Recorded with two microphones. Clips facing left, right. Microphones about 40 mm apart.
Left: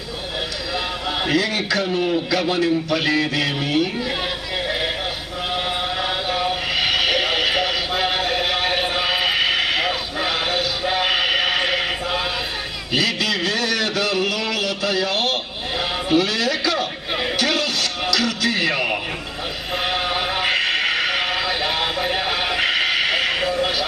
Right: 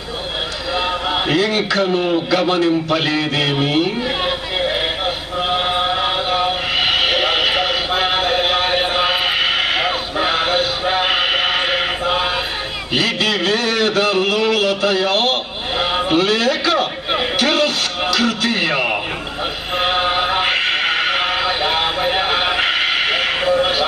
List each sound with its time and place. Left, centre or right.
1.2 s a man's voice: right
5.5 s a sound: right
17.3 s music: right